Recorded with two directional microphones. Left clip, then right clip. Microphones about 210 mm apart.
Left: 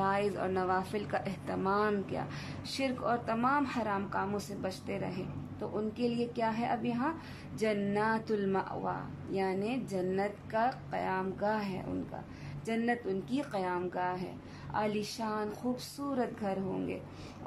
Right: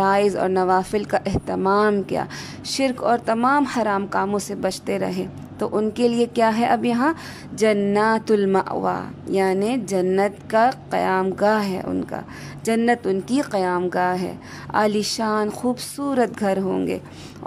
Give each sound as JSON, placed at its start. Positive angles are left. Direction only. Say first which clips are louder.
{"t": 0.0, "sound": "a woman's voice", "louder": "right 13 dB", "side_deg": -30}